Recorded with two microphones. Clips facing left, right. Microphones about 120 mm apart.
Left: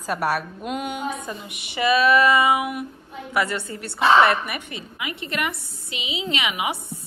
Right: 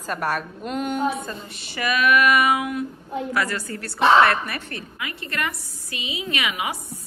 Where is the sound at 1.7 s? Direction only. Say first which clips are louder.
Left 2 dB; 30° left (ahead or behind).